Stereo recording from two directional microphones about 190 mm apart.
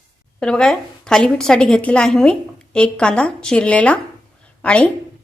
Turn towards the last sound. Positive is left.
turn(degrees=5)  # may be behind; listen again after turning